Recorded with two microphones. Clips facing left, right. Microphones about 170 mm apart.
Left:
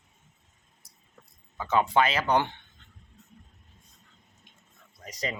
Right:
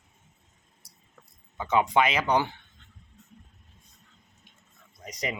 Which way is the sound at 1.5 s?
15° right (ahead or behind).